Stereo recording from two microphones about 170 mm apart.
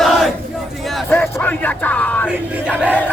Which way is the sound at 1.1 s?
10° left (ahead or behind).